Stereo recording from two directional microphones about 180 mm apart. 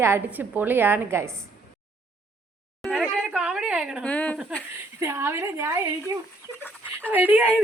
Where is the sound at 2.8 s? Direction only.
Centre (ahead or behind).